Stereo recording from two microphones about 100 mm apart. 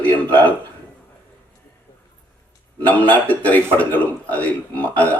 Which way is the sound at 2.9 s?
15° left (ahead or behind).